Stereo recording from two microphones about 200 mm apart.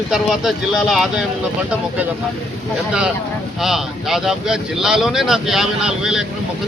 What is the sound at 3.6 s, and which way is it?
Speech, centre (ahead or behind).